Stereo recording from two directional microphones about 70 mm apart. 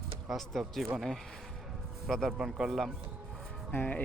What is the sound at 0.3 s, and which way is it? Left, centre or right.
Speech, centre.